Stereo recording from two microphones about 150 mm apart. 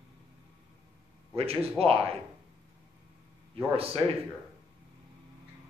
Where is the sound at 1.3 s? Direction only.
40° right (ahead or behind).